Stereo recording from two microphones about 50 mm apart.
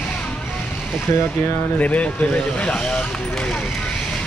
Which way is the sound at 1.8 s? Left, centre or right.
Left.